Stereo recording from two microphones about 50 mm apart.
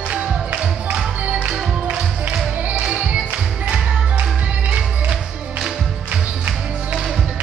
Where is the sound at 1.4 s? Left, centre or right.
Right.